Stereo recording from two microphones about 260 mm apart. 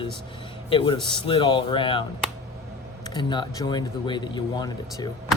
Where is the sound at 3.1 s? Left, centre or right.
Centre.